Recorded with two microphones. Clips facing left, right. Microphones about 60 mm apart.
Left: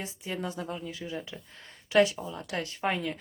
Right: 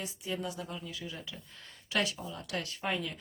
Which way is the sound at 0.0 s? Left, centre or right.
Left.